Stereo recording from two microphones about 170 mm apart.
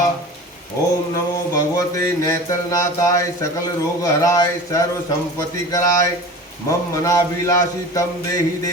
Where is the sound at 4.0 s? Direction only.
20° left (ahead or behind).